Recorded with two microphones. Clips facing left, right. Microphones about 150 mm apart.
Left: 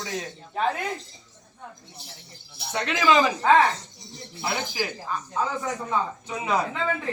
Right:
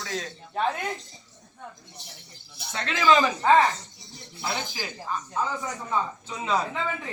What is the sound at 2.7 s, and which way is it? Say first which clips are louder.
Speech: left 3 dB; 15° left (ahead or behind).